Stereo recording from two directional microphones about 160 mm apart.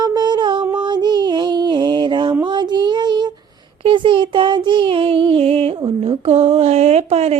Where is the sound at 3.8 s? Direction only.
30° right (ahead or behind).